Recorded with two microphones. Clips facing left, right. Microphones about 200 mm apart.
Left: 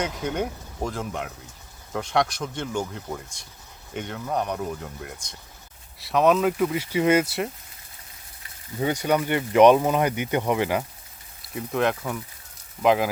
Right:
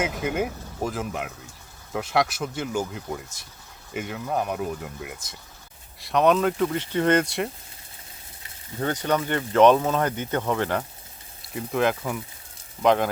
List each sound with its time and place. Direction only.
0.0 s speech: 5° right (ahead or behind)
8.8 s speech: 10° left (ahead or behind)
11.4 s speech: centre (ahead or behind)